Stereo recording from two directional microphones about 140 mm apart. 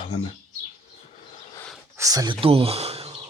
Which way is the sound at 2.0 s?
25° right (ahead or behind).